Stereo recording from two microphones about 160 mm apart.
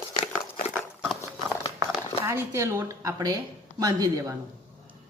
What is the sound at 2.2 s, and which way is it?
Speech, 15° right (ahead or behind).